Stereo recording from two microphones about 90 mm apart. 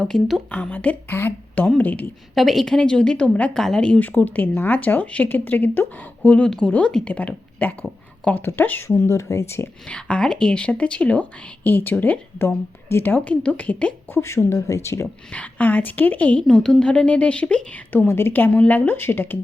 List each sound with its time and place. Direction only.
0.0 s speech: centre (ahead or behind)
0.5 s a woman's voice: 15° left (ahead or behind)
2.3 s a woman's voice: centre (ahead or behind); by 9.6 s 30° left (ahead or behind)
9.8 s a woman's voice: 10° left (ahead or behind)
14.1 s speech: 30° left (ahead or behind)
15.3 s a woman's voice: 15° left (ahead or behind)